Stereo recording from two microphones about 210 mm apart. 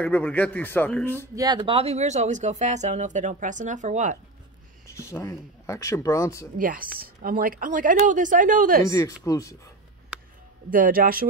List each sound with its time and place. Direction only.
0.0 s a man's voice: 5° left (ahead or behind)
1.3 s speech: 20° right (ahead or behind); by 4.2 s 35° right (ahead or behind)
4.8 s speech: 15° left (ahead or behind)
6.6 s speech: 40° right (ahead or behind)
8.8 s a man's voice: 15° left (ahead or behind)
10.7 s speech: 40° right (ahead or behind)